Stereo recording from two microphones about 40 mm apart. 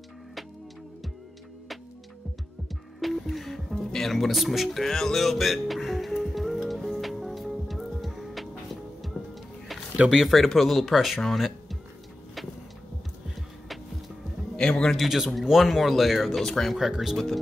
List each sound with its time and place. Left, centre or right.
3.0 s music: centre
3.7 s speech: centre
4.6 s speech: centre
7.0 s music: centre
10.0 s speech: centre
10.3 s speech: centre
11.3 s music: centre
14.6 s a man's voice: left
15.0 s speech: centre
15.6 s speech: centre
16.7 s speech: centre